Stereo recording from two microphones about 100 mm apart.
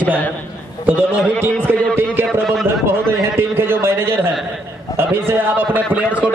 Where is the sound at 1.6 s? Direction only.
20° right (ahead or behind).